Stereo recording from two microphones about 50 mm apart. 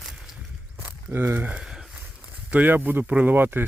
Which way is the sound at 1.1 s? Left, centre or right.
Right.